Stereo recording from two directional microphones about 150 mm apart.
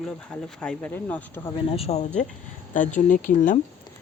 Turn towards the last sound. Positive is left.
turn(degrees=60)  # may be behind; listen again after turning